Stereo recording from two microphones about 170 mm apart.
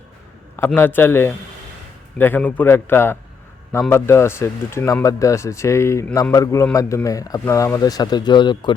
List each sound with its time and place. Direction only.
0.5 s speech: 10° left (ahead or behind)